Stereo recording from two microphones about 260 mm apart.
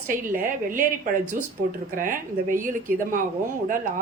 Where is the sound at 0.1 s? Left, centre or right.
Right.